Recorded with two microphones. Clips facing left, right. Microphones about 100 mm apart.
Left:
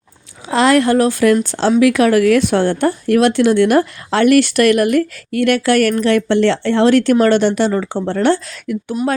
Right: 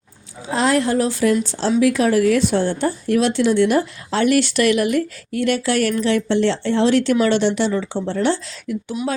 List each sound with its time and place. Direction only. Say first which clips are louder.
0.4 s speech: left 5 dB; 80° left; by 9.1 s 50° left (ahead or behind)